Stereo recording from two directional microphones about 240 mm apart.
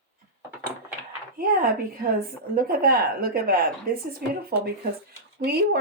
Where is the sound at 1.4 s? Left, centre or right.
Right.